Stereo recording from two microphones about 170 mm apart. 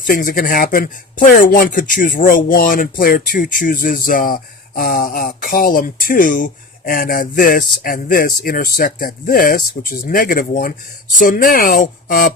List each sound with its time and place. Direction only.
0.0 s speech: 55° left (ahead or behind)